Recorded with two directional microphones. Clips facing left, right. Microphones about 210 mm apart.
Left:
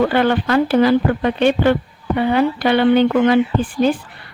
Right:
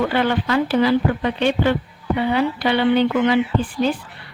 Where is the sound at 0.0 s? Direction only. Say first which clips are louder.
Left 4 dB; 50° left (ahead or behind).